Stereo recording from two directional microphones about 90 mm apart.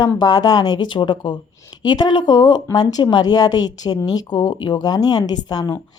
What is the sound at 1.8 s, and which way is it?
Speech, 50° left (ahead or behind).